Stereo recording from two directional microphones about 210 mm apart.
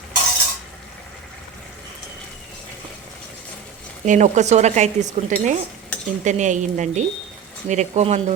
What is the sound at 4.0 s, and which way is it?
Speech, 35° right (ahead or behind).